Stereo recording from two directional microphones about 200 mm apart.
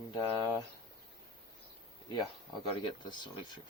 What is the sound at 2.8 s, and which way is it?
Speech, 20° left (ahead or behind).